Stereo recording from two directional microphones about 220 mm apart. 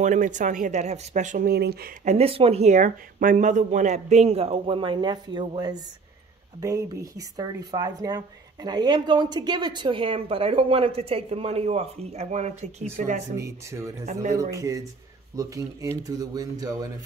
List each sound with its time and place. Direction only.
0.0 s speech: 35° right (ahead or behind)
2.0 s a woman's voice: 25° right (ahead or behind)
13.4 s speech: 15° right (ahead or behind)